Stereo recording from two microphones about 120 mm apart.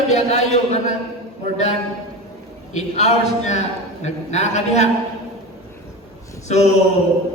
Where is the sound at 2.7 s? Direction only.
70° left (ahead or behind).